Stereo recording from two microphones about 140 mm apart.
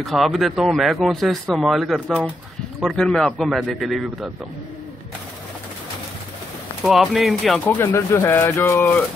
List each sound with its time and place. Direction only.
0.0 s speech: centre (ahead or behind)
6.8 s speech: centre (ahead or behind)
7.6 s speech: 15° left (ahead or behind)